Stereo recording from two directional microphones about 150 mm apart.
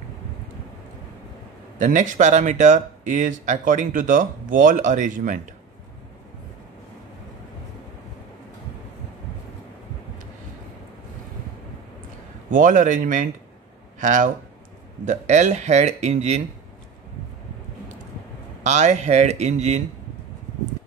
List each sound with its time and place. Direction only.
1.8 s speech: 55° right (ahead or behind)
12.4 s speech: 60° right (ahead or behind)
18.6 s speech: 50° right (ahead or behind)